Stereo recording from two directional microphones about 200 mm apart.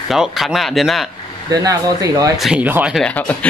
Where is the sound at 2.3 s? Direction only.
5° right (ahead or behind).